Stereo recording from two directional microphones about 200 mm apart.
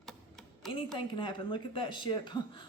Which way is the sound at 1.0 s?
25° left (ahead or behind).